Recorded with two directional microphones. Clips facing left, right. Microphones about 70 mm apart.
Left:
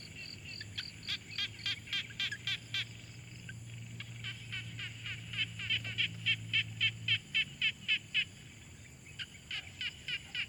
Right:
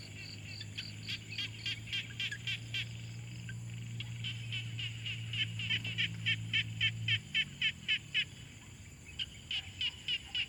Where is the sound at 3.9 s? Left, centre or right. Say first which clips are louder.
Even; left.